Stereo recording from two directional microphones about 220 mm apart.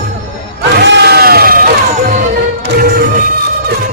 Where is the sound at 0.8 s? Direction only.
45° right (ahead or behind).